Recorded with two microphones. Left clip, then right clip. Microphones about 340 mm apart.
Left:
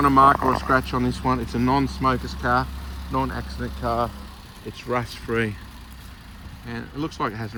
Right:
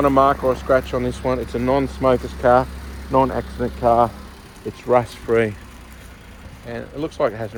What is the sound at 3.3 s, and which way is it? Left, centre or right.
Speech, right.